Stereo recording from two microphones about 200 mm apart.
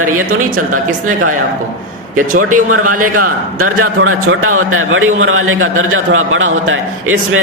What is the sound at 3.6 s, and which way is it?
A man's voice, 90° right.